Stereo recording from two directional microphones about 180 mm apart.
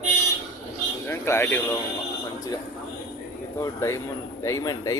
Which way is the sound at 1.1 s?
10° left (ahead or behind).